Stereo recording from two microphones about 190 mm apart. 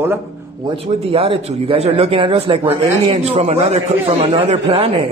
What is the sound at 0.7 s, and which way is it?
A man's voice, 30° right (ahead or behind).